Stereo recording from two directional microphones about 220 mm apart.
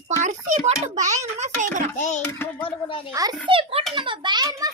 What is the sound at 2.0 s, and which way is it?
A child's voice, 35° left (ahead or behind).